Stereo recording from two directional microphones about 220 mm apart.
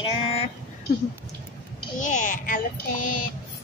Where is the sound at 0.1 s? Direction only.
25° left (ahead or behind).